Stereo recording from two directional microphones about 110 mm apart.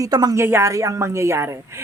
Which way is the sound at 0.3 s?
25° right (ahead or behind).